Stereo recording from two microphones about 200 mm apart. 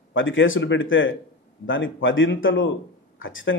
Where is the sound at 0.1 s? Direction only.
70° left (ahead or behind).